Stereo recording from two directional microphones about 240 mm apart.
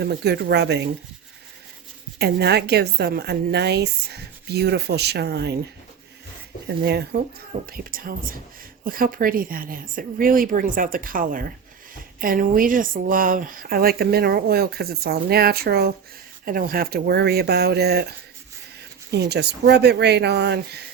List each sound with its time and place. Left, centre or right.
0.0 s a woman's voice: right
2.1 s a woman's voice: right
6.7 s a woman's voice: right
19.1 s a woman's voice: right